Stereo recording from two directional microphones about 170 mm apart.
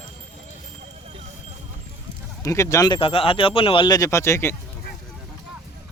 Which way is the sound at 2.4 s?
20° left (ahead or behind).